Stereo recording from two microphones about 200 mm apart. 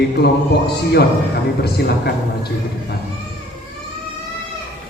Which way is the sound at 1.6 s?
50° left (ahead or behind).